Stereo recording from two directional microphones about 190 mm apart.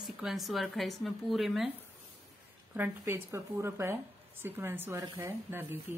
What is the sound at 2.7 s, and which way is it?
A woman's voice, 10° right (ahead or behind).